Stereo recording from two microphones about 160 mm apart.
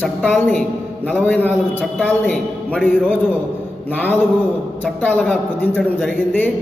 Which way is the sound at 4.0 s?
10° left (ahead or behind).